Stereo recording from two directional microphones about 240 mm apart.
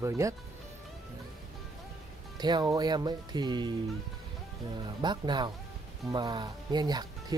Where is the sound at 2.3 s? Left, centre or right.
Centre.